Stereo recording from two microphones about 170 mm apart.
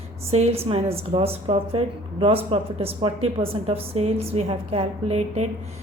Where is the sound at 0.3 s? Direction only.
35° right (ahead or behind).